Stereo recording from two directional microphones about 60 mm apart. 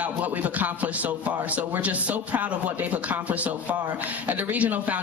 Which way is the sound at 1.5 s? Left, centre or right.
Right.